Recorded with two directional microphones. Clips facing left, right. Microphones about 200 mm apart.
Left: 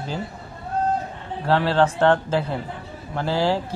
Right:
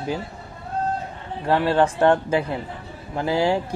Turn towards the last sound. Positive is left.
turn(degrees=-15)  # may be behind; listen again after turning